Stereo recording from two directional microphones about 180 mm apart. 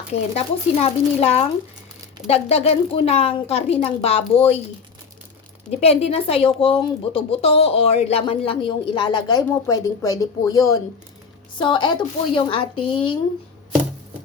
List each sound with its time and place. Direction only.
0.3 s speech: 35° left (ahead or behind)
5.8 s speech: 35° left (ahead or behind)